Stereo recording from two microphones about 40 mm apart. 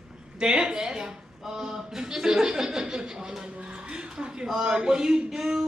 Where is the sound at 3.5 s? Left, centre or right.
Right.